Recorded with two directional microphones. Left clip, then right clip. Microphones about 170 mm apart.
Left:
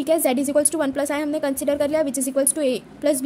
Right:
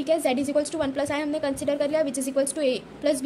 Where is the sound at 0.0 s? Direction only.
40° left (ahead or behind).